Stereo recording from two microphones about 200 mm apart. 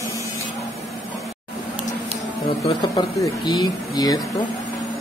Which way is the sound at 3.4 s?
20° left (ahead or behind).